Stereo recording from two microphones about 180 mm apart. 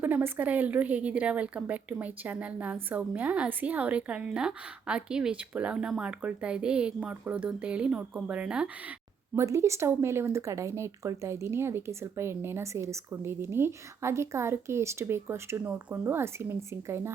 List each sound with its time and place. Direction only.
0.0 s speech: 10° right (ahead or behind)